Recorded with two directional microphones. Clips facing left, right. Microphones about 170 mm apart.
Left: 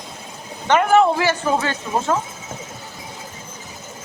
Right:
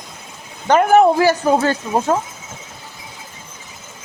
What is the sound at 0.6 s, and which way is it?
Speech, 40° right (ahead or behind).